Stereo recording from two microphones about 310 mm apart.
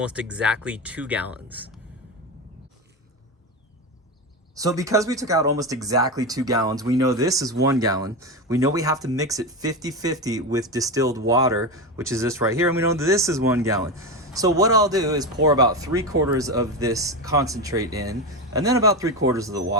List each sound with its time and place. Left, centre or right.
0.0 s speech: centre
4.5 s speech: centre